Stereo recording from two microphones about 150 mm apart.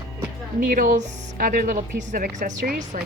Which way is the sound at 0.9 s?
65° right (ahead or behind).